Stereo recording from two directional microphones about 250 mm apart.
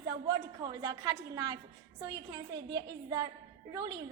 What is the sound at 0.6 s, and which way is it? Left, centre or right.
A woman's voice, centre.